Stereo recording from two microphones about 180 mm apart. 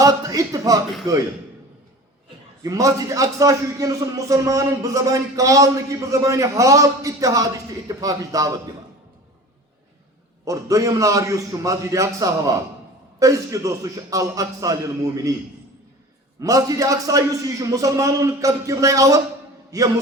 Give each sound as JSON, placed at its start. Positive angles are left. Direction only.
{"t": 0.0, "sound": "a man's voice", "side_deg": -20}
{"t": 2.6, "sound": "a man's voice", "side_deg": -20}
{"t": 10.4, "sound": "a man's voice", "side_deg": -20}
{"t": 16.4, "sound": "a man's voice", "side_deg": -20}